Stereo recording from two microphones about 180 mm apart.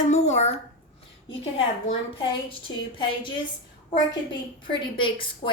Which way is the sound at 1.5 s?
30° left (ahead or behind).